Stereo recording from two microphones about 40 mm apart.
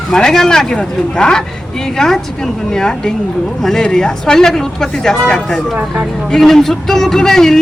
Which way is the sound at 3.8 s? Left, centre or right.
Centre.